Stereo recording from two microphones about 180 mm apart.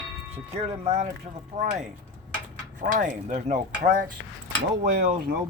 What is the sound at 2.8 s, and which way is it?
Speech, 45° right (ahead or behind).